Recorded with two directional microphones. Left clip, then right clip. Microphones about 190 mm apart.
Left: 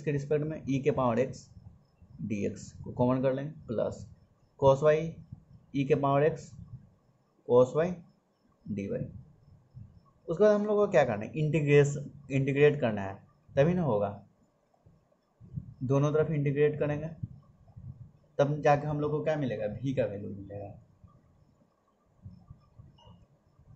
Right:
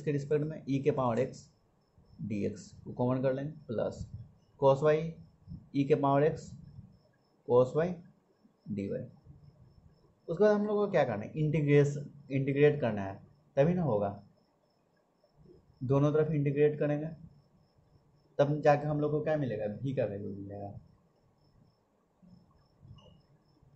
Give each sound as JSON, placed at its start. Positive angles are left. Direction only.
{"t": 0.0, "sound": "speech", "side_deg": 5}
{"t": 10.2, "sound": "speech", "side_deg": 10}
{"t": 15.9, "sound": "speech", "side_deg": 5}
{"t": 18.3, "sound": "speech", "side_deg": 5}